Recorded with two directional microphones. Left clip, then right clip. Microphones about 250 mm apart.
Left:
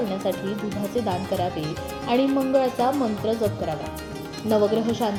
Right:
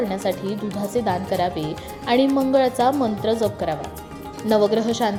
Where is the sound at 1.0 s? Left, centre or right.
Centre.